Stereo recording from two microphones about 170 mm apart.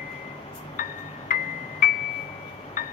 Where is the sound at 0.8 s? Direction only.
55° left (ahead or behind).